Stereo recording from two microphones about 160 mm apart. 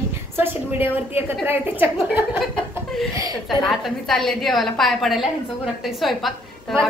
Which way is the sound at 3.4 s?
Centre (ahead or behind).